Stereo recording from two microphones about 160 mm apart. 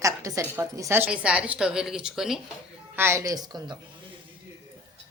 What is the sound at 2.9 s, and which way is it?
Speech, 15° right (ahead or behind).